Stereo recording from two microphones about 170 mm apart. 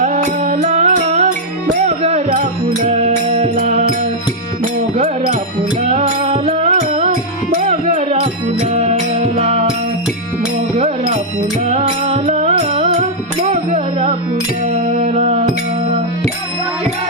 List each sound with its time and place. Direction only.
0.0 s music: 50° right (ahead or behind)
2.3 s music: 55° right (ahead or behind)
3.5 s mantra: 50° right (ahead or behind)
4.6 s music: 45° right (ahead or behind)
10.8 s music: 40° right (ahead or behind)